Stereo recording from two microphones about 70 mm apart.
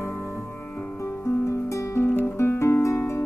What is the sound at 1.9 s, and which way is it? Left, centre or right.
Guitar, left.